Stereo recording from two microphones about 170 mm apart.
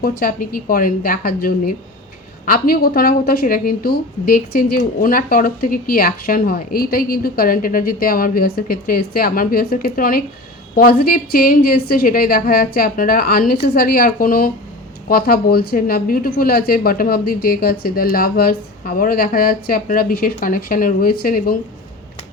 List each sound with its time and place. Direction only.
0.0 s a woman's voice: 60° left (ahead or behind)